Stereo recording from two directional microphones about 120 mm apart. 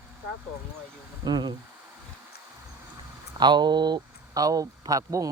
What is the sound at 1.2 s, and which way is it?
Speech, 40° right (ahead or behind).